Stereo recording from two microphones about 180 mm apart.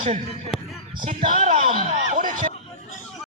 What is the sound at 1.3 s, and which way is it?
A man's voice, 45° right (ahead or behind).